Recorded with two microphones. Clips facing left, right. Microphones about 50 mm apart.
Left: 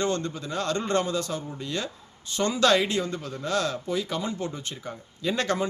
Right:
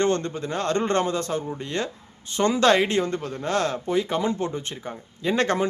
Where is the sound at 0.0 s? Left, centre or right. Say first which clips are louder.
Right 4 dB; right.